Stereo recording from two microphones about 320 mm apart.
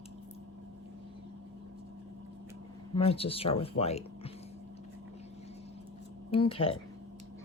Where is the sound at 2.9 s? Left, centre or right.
Centre.